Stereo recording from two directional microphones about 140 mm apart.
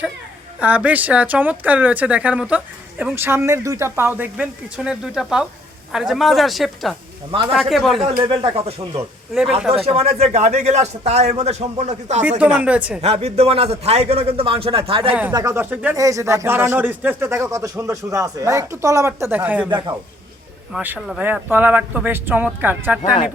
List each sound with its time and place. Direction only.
0.6 s a woman's voice: 10° right (ahead or behind)
7.3 s speech: 35° right (ahead or behind)
7.5 s a woman's voice: centre (ahead or behind)
8.3 s speech: 40° right (ahead or behind)
9.3 s a woman's voice: 5° right (ahead or behind)
9.7 s a man's voice: 45° right (ahead or behind)
12.4 s speech: 10° right (ahead or behind)
13.0 s a man's voice: 50° right (ahead or behind)
15.3 s speech: 20° right (ahead or behind)
16.0 s speech: 25° right (ahead or behind)
19.7 s speech: 30° right (ahead or behind)
20.7 s speech: 15° right (ahead or behind)